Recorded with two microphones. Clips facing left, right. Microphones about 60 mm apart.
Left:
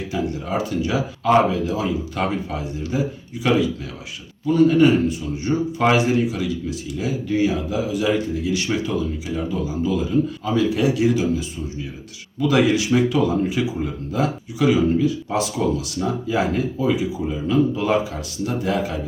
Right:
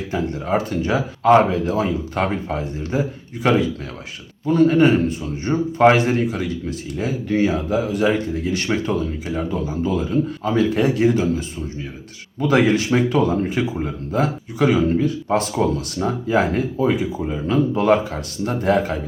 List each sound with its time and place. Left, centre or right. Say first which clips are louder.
0.1 s a man's voice: right 4 dB; right